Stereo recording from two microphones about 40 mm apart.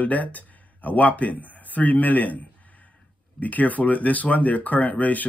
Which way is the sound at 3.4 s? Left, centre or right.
Left.